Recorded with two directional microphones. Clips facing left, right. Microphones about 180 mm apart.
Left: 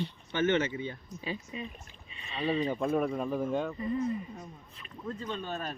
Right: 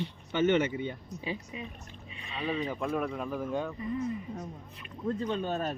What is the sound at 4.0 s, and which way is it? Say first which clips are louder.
Speech: left 1 dB; 85° right.